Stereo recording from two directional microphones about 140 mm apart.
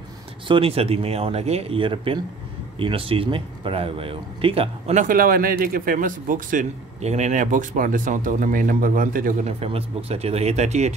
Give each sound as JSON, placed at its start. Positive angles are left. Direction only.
{"t": 0.5, "sound": "speech", "side_deg": -40}
{"t": 4.9, "sound": "speech", "side_deg": -80}
{"t": 7.0, "sound": "speech", "side_deg": -55}
{"t": 9.5, "sound": "speech", "side_deg": -45}